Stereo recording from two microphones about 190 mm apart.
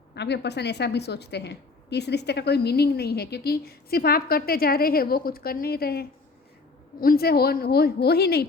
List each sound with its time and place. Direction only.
0.1 s a woman's voice: 60° left (ahead or behind)